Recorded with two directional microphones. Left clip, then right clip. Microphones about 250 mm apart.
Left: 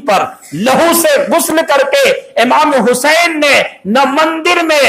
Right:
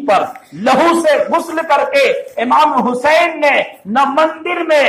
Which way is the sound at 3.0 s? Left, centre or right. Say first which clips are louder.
Right 2 dB; left.